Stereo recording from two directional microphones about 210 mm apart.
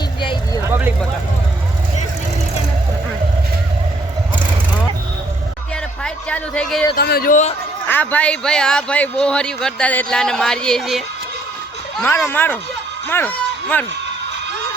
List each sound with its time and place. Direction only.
0.2 s vehicle: 20° left (ahead or behind)
0.6 s vehicle: 10° right (ahead or behind)
6.0 s a sound: 5° left (ahead or behind)
6.9 s speech: 45° left (ahead or behind)
7.9 s speech: 10° left (ahead or behind)
11.9 s speech: 10° left (ahead or behind)